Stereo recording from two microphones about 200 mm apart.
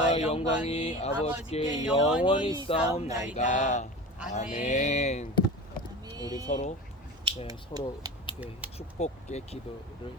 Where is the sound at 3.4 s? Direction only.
40° left (ahead or behind).